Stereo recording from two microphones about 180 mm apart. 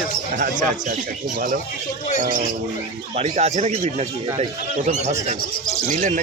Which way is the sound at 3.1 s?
40° right (ahead or behind).